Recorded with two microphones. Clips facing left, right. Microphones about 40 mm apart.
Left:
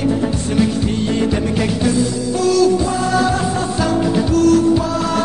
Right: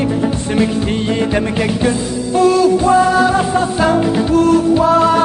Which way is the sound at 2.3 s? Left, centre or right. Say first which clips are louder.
Right 3 dB; right.